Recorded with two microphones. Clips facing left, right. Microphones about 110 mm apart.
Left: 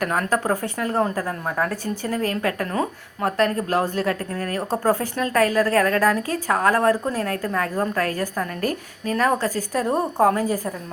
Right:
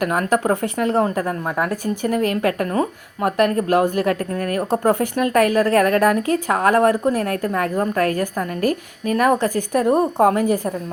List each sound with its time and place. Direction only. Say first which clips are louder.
0.0 s a woman's voice: right 3 dB; 15° right (ahead or behind)
9.1 s speech: right 4 dB; 15° right (ahead or behind)